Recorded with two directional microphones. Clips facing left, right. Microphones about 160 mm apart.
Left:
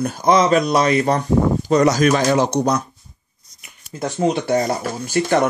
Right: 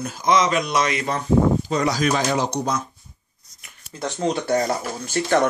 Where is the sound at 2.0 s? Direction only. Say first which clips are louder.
Left 5 dB; 60° left (ahead or behind).